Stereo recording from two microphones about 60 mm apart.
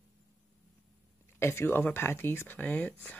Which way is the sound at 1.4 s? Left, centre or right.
Left.